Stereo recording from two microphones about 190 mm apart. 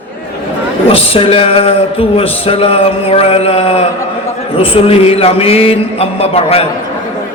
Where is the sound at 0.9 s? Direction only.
30° left (ahead or behind).